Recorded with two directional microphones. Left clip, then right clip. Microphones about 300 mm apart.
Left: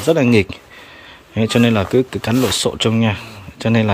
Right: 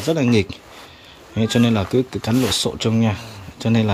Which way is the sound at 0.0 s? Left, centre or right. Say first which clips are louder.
Left 5 dB; centre.